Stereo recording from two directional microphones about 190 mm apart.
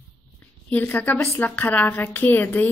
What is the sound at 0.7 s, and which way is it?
A woman's voice, 10° left (ahead or behind).